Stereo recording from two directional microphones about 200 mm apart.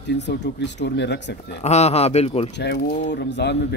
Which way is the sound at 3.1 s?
60° left (ahead or behind).